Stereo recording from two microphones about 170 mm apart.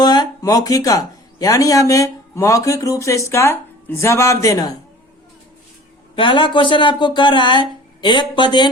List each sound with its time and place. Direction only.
0.0 s speech: 25° left (ahead or behind)
6.1 s speech: 30° left (ahead or behind)